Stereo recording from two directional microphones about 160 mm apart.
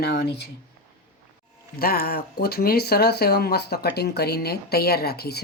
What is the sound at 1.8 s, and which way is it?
Speech, 70° left (ahead or behind).